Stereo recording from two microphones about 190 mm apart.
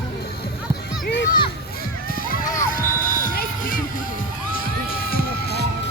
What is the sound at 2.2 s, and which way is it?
Music, 50° left (ahead or behind).